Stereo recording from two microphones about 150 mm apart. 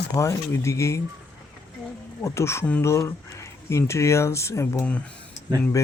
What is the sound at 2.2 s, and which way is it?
Speech, 20° left (ahead or behind).